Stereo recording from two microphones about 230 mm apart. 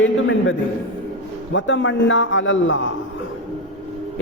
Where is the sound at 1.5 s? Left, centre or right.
Left.